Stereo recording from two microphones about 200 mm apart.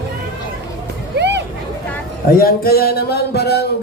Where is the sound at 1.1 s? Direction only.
60° right (ahead or behind).